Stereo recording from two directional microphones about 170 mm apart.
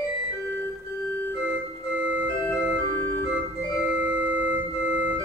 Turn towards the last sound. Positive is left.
turn(degrees=-10)  # may be behind; listen again after turning